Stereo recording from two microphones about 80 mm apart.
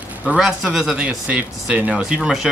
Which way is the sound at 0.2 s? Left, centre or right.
Centre.